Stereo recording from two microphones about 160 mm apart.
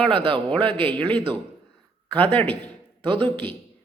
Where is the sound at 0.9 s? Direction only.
10° left (ahead or behind).